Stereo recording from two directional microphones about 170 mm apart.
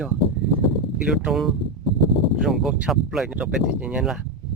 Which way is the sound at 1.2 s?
Centre (ahead or behind).